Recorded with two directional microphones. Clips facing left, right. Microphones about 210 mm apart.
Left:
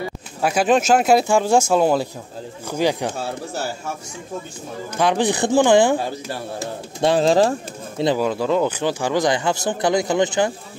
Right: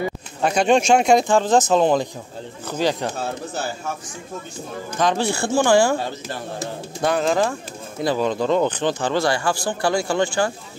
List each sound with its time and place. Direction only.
0.4 s speech: 5° left (ahead or behind)
4.9 s speech: 15° left (ahead or behind)
7.0 s speech: 30° left (ahead or behind)
8.2 s speech: 5° left (ahead or behind)